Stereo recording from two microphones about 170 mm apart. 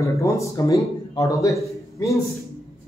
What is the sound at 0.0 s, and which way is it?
Speech, 20° left (ahead or behind).